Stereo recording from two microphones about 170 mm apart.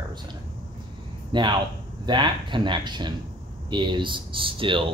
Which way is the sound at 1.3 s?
25° right (ahead or behind).